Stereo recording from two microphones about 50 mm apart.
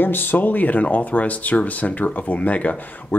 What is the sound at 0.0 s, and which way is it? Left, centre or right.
Speech, left.